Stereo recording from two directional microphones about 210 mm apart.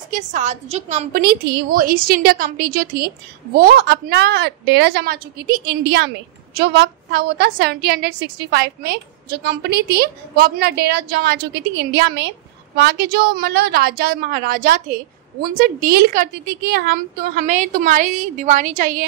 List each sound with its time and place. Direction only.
0.1 s a woman's voice: 35° right (ahead or behind)